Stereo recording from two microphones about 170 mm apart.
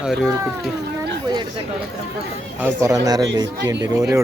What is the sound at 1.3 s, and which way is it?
Chatter, 25° right (ahead or behind).